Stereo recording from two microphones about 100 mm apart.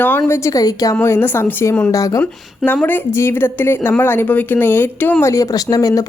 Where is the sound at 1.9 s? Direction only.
35° left (ahead or behind).